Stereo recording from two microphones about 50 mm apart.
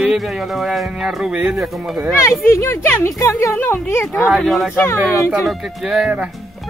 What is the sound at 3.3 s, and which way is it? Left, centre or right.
Speech, left.